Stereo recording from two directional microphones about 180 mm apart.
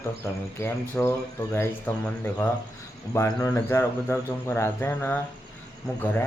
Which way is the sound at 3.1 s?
15° left (ahead or behind).